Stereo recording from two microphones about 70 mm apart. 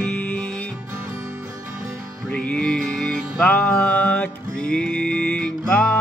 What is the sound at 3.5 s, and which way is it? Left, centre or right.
Music, left.